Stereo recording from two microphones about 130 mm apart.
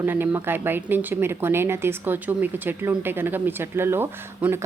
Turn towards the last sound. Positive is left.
turn(degrees=-15)  # may be behind; listen again after turning